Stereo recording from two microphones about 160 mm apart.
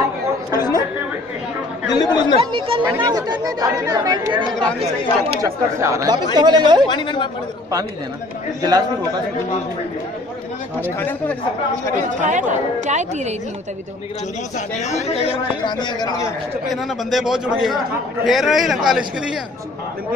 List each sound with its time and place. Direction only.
0.6 s chatter: 25° left (ahead or behind)
1.9 s speech: 25° left (ahead or behind)
2.3 s speech: 35° right (ahead or behind)
6.9 s speech: 30° left (ahead or behind)
8.6 s speech: 25° right (ahead or behind)
10.8 s speech: 10° left (ahead or behind)
12.2 s a woman's voice: 50° right (ahead or behind)
14.8 s speech: 45° left (ahead or behind); by 16.3 s 25° left (ahead or behind)
16.6 s speech: centre (ahead or behind)